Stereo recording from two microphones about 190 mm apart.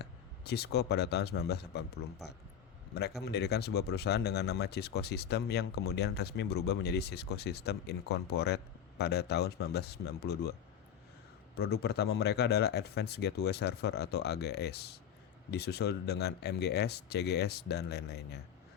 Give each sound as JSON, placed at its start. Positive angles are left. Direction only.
{"t": 0.0, "sound": "speech", "side_deg": 60}
{"t": 11.5, "sound": "speech", "side_deg": 55}